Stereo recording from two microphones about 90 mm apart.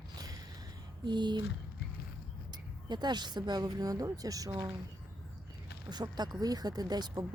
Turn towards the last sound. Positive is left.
turn(degrees=-45)  # may be behind; listen again after turning